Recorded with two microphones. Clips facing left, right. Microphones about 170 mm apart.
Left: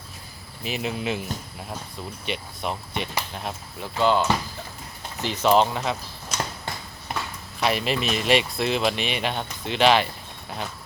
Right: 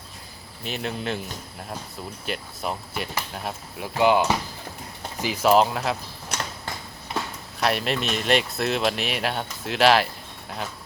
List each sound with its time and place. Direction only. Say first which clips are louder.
0.6 s speech: left 1 dB; 5° left (ahead or behind)
3.9 s speech: right 1 dB; 15° right (ahead or behind)
6.3 s a sound: left 2 dB; 65° right (ahead or behind)
7.6 s speech: even; centre (ahead or behind)